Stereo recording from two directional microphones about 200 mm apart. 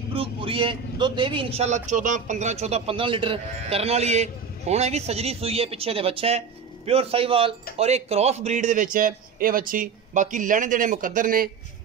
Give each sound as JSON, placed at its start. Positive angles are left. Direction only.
{"t": 0.1, "sound": "a man's voice", "side_deg": -25}